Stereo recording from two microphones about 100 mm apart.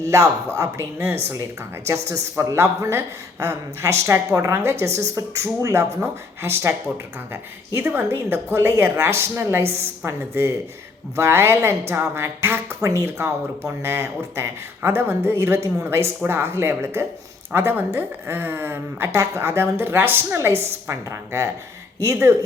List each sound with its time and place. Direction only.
0.1 s speech: 35° right (ahead or behind)
2.4 s a woman's voice: 30° right (ahead or behind)
4.0 s a woman's voice: 30° right (ahead or behind)